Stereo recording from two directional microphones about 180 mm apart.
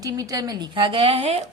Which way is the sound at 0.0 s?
20° right (ahead or behind).